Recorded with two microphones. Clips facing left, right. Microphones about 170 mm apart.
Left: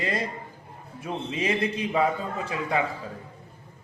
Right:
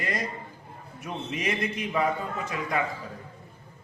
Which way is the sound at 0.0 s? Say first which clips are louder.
Left 3 dB; 30° left (ahead or behind).